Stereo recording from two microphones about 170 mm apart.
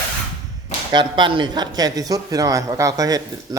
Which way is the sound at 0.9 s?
30° right (ahead or behind).